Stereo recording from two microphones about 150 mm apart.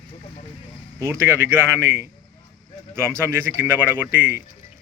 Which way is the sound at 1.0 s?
15° right (ahead or behind).